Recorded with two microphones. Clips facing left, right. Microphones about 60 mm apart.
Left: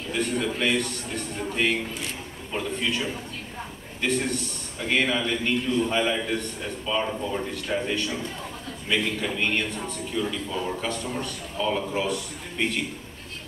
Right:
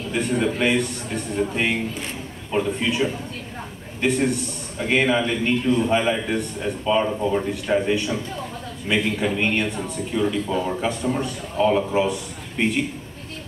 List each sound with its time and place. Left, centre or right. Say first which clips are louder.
0.1 s a man's voice: right 4 dB; right